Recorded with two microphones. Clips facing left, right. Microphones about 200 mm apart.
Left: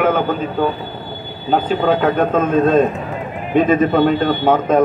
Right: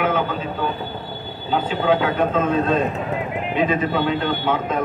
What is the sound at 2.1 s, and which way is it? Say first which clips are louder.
A man's voice: left 4 dB; 45° left (ahead or behind).